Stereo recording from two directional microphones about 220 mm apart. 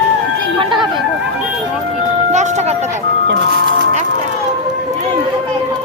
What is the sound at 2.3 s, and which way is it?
Music, 30° right (ahead or behind).